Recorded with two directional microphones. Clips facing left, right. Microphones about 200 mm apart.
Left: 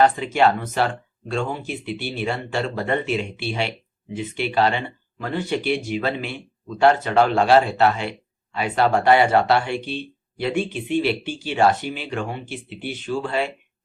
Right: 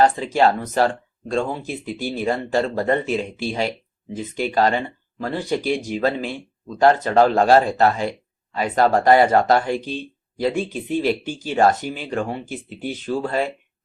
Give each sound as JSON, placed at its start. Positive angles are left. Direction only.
{"t": 0.0, "sound": "speech", "side_deg": -35}